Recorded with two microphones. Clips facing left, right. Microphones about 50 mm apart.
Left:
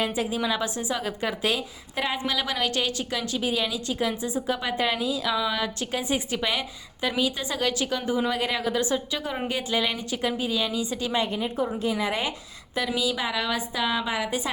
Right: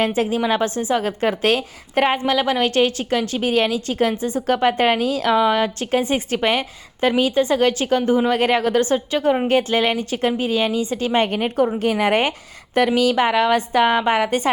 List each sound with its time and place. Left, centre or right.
0.0 s a woman's voice: right
5.4 s a woman's voice: right
11.3 s a woman's voice: right